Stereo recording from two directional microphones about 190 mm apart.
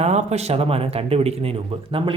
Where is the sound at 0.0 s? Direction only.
35° right (ahead or behind).